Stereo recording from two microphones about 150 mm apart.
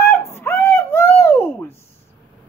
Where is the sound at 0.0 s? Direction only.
15° left (ahead or behind).